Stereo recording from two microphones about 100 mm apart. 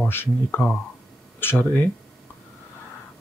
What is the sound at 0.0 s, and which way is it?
Speech, 20° left (ahead or behind).